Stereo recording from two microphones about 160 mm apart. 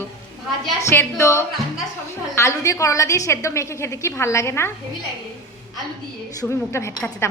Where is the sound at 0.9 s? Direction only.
10° left (ahead or behind).